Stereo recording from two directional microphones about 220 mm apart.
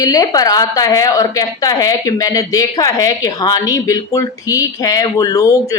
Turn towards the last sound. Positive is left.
turn(degrees=15)  # may be behind; listen again after turning